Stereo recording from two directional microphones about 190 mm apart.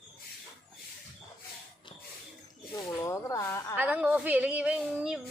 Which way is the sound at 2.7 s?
15° left (ahead or behind).